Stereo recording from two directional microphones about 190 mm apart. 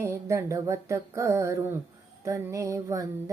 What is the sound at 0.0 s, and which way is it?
Music, 15° right (ahead or behind).